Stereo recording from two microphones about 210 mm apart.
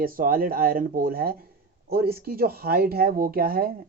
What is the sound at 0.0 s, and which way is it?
Speech, 45° right (ahead or behind).